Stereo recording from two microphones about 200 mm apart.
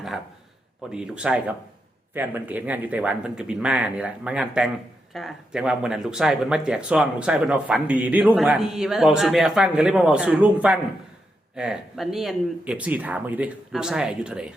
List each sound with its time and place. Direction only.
0.9 s speech: 5° right (ahead or behind)